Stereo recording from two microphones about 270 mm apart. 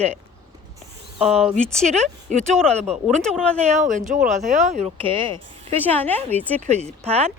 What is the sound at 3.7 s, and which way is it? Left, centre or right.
Speech, right.